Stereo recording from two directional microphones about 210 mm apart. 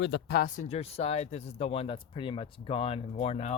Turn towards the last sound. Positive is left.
turn(degrees=30)  # may be behind; listen again after turning